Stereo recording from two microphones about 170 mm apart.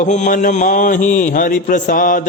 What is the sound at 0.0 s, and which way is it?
Music, 45° left (ahead or behind).